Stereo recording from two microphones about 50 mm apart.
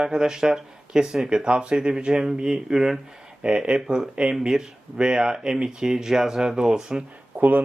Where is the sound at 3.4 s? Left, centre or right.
Right.